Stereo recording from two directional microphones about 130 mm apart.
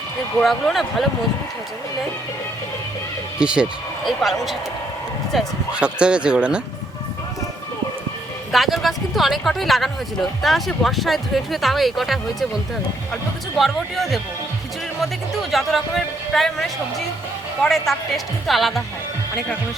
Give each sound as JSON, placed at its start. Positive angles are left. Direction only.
{"t": 0.4, "sound": "speech", "side_deg": 0}
{"t": 3.3, "sound": "speech", "side_deg": -5}
{"t": 8.5, "sound": "speech", "side_deg": 0}
{"t": 13.6, "sound": "speech", "side_deg": 0}
{"t": 15.5, "sound": "speech", "side_deg": 0}